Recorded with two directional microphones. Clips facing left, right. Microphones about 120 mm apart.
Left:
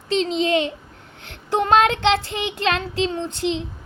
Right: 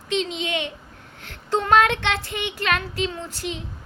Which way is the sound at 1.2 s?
20° left (ahead or behind).